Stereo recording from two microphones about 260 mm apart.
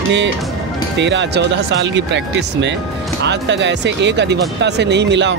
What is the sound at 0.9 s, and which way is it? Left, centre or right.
Speech, right.